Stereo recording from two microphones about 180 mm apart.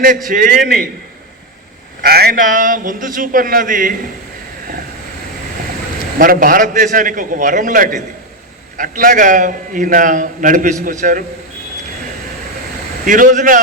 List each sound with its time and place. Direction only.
0.3 s a man's voice: 50° right (ahead or behind)
2.0 s a man's voice: 60° right (ahead or behind)
6.1 s a man's voice: 50° right (ahead or behind)
13.1 s a man's voice: 45° right (ahead or behind)